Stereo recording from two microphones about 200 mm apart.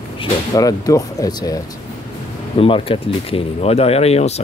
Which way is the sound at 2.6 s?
25° left (ahead or behind).